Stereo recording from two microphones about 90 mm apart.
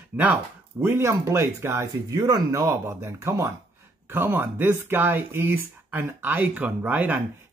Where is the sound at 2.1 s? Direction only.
45° right (ahead or behind).